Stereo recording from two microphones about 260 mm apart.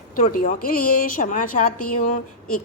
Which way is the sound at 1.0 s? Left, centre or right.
Left.